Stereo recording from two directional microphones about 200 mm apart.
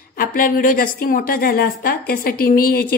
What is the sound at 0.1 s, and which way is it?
A woman's voice, 45° left (ahead or behind).